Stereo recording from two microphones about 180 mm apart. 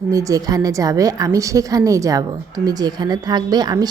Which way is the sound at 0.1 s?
20° right (ahead or behind).